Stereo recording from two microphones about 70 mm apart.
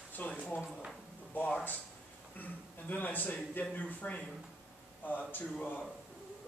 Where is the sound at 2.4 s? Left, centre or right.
Left.